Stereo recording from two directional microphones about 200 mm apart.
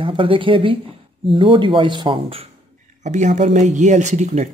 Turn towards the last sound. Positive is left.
turn(degrees=-35)  # may be behind; listen again after turning